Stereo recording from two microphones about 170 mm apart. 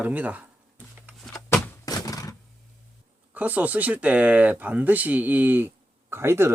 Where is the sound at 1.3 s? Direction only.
20° left (ahead or behind).